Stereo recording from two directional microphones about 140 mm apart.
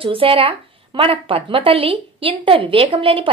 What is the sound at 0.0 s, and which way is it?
Speech, 40° right (ahead or behind).